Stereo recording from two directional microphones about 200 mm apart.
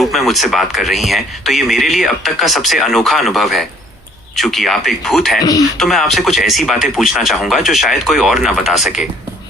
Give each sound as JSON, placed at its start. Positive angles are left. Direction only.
{"t": 0.0, "sound": "speech", "side_deg": 0}
{"t": 5.4, "sound": "speech", "side_deg": 20}
{"t": 5.7, "sound": "speech", "side_deg": 0}